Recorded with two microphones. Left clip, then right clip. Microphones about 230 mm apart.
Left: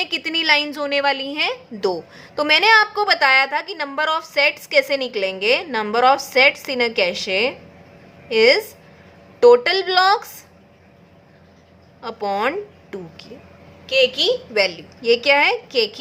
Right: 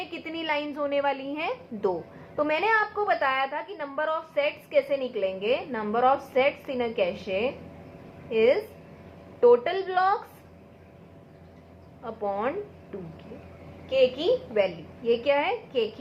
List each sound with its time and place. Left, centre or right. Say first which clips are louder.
0.0 s a woman's voice: left 13 dB; left
12.0 s a woman's voice: left 8 dB; left